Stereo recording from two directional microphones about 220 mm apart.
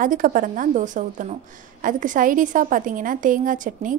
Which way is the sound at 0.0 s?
40° right (ahead or behind).